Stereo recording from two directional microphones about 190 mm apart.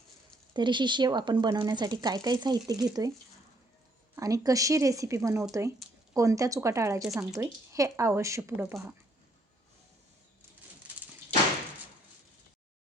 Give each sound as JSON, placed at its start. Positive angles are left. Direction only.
{"t": 0.5, "sound": "speech", "side_deg": -25}
{"t": 4.1, "sound": "speech", "side_deg": -20}